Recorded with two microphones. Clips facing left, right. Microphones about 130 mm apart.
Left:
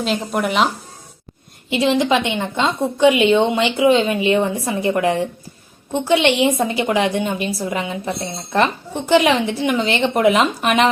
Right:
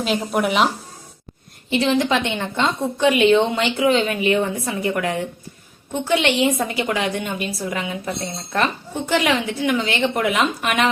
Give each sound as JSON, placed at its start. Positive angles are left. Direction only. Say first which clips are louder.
{"t": 0.0, "sound": "speech", "louder": "even", "side_deg": -5}
{"t": 1.7, "sound": "a woman's voice", "louder": "left 2 dB", "side_deg": 20}